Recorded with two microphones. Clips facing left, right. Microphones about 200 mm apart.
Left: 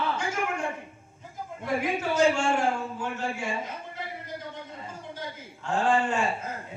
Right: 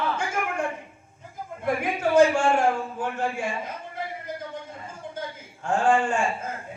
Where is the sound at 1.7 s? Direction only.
55° right (ahead or behind).